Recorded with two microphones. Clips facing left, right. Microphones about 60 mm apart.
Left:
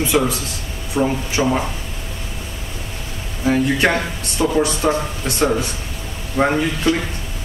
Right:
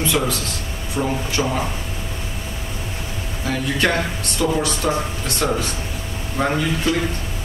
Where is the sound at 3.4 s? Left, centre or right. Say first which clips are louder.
Left 4 dB; left.